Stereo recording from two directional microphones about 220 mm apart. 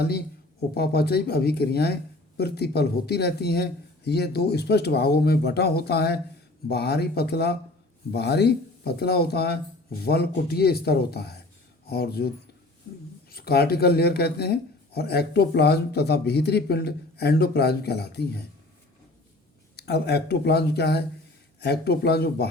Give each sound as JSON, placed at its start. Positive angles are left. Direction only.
{"t": 0.7, "sound": "speech", "side_deg": 45}
{"t": 13.3, "sound": "speech", "side_deg": 45}
{"t": 19.7, "sound": "speech", "side_deg": 45}